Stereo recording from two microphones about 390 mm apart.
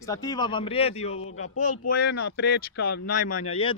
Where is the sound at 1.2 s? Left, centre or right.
Left.